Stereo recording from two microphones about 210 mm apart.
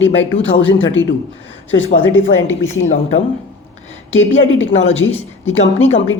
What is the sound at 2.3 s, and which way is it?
Speech, 10° left (ahead or behind).